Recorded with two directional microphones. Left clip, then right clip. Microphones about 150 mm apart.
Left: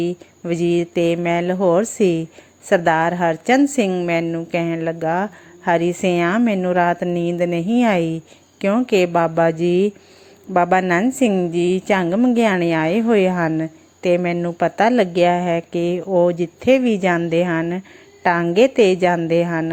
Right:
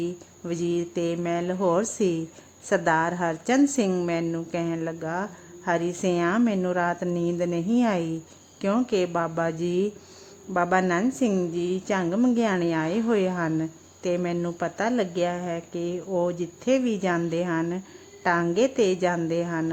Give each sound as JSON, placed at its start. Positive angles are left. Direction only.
{"t": 0.0, "sound": "mantra", "side_deg": 20}
{"t": 4.0, "sound": "a woman's voice", "side_deg": 20}
{"t": 18.4, "sound": "mantra", "side_deg": 15}
{"t": 19.3, "sound": "a woman's voice", "side_deg": 20}